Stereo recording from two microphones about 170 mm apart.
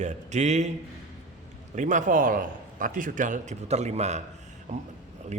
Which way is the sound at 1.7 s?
50° right (ahead or behind).